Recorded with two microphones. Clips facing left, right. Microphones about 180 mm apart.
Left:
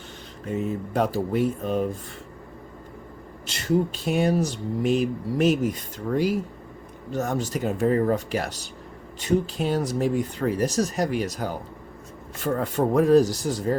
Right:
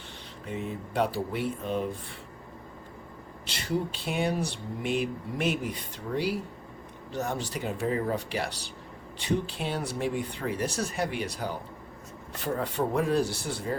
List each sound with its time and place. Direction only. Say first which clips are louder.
0.4 s speech: left 7 dB; 45° left (ahead or behind)
3.4 s speech: left 7 dB; 45° left (ahead or behind)